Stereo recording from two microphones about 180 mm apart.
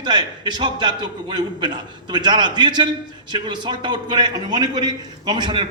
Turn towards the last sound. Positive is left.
turn(degrees=-25)  # may be behind; listen again after turning